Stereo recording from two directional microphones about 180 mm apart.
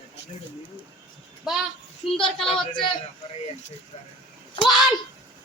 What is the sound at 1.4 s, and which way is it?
Speech, centre (ahead or behind).